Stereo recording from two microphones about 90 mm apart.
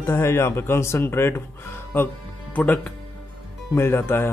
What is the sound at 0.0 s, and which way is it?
Speech, 25° left (ahead or behind).